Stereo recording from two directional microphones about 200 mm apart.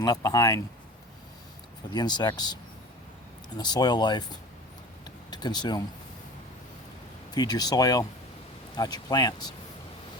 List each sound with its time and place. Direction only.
0.0 s speech: 20° left (ahead or behind)
1.9 s speech: 20° left (ahead or behind)
3.6 s speech: 20° left (ahead or behind)
5.0 s a sound: 20° left (ahead or behind)
7.3 s speech: 20° left (ahead or behind)